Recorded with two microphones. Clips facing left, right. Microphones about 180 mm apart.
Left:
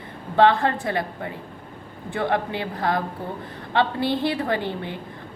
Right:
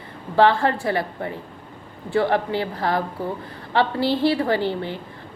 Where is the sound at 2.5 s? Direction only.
20° left (ahead or behind).